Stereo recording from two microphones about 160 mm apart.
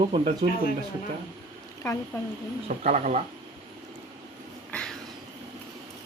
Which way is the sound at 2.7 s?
50° right (ahead or behind).